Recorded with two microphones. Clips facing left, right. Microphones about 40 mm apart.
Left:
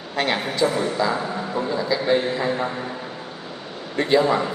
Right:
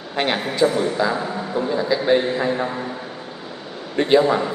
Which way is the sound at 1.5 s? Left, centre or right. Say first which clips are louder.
Right 3 dB; right.